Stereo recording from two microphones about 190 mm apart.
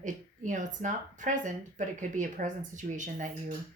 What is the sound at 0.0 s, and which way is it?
Speech, 40° right (ahead or behind).